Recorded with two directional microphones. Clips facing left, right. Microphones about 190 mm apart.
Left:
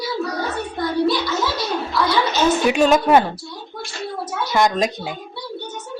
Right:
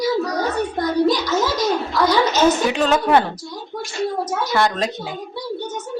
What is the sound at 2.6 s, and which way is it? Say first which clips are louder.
Speech: left 3 dB; 15° left (ahead or behind).